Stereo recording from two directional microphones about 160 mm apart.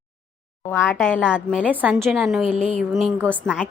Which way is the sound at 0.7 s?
10° left (ahead or behind).